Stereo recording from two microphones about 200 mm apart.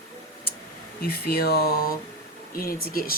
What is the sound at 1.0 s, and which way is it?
Speech, 50° left (ahead or behind).